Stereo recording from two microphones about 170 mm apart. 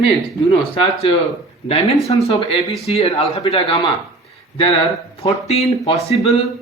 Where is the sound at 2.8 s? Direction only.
40° left (ahead or behind).